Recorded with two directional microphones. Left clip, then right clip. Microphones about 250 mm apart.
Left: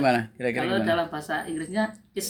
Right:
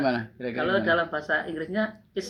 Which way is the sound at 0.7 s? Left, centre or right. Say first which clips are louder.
Right 4 dB; centre.